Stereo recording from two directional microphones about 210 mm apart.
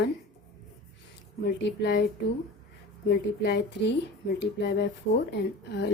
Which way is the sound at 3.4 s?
50° left (ahead or behind).